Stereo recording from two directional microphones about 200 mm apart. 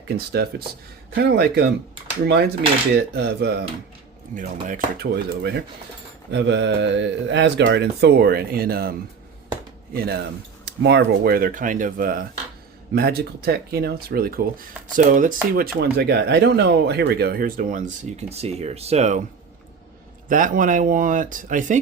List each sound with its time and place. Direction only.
0.4 s speech: 50° right (ahead or behind)
4.6 s speech: 40° right (ahead or behind)
5.4 s speech: 55° right (ahead or behind)
9.9 s speech: 50° right (ahead or behind); by 19.2 s 35° right (ahead or behind)
20.2 s speech: 40° right (ahead or behind)